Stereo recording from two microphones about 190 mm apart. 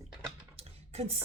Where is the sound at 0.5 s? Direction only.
30° right (ahead or behind).